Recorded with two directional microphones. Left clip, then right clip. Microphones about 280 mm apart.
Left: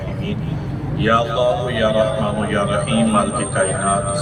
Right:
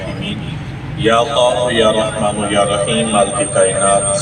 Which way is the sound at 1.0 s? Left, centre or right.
Right.